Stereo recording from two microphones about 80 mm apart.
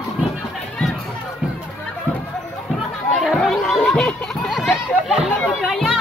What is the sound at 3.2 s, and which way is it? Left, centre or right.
Chatter, centre.